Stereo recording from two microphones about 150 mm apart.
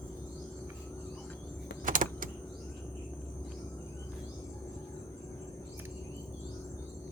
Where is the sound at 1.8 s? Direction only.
65° right (ahead or behind).